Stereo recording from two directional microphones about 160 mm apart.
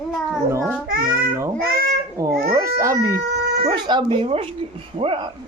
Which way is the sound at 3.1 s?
80° right.